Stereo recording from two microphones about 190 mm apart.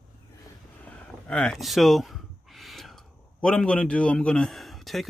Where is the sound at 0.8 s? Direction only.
5° left (ahead or behind).